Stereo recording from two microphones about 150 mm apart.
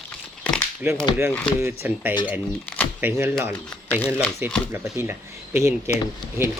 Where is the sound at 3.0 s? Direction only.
15° right (ahead or behind).